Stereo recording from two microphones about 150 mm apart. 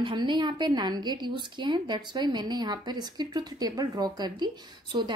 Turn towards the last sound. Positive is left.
turn(degrees=-30)  # may be behind; listen again after turning